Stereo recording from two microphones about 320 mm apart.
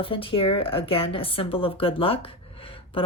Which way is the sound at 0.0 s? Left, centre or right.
Centre.